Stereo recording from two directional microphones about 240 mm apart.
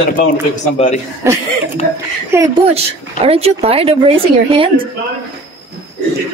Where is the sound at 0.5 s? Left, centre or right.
Left.